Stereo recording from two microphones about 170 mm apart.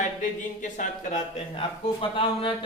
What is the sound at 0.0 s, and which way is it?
Speech, 45° left (ahead or behind).